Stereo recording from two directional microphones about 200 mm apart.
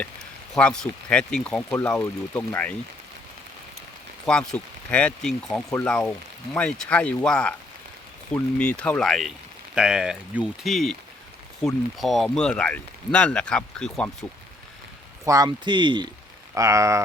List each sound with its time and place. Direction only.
0.5 s speech: 5° left (ahead or behind)
4.3 s speech: 5° left (ahead or behind)
15.2 s speech: 15° right (ahead or behind)